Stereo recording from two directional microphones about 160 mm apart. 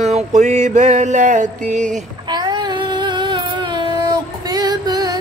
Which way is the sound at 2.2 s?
25° right (ahead or behind).